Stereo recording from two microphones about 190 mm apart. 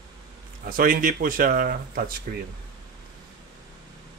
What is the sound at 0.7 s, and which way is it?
Speech, 45° right (ahead or behind).